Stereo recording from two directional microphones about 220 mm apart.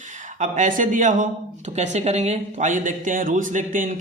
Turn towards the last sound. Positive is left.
turn(degrees=-35)  # may be behind; listen again after turning